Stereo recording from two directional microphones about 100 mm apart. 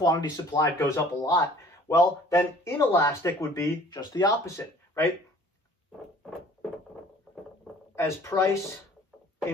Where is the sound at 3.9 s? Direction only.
45° left (ahead or behind).